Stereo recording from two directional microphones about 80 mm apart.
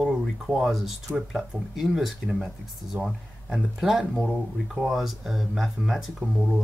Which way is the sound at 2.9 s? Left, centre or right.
Right.